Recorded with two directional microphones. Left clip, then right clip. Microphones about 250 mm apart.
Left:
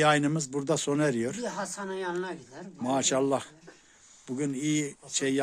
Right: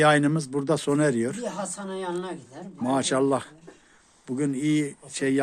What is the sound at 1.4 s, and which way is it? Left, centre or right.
A woman's voice, right.